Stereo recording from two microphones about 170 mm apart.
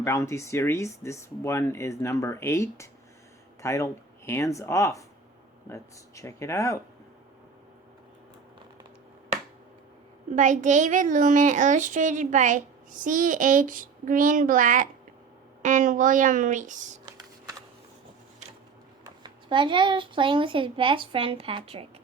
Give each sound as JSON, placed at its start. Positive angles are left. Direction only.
{"t": 0.0, "sound": "speech", "side_deg": 15}
{"t": 10.3, "sound": "a child's voice", "side_deg": -45}
{"t": 19.0, "sound": "speech", "side_deg": -25}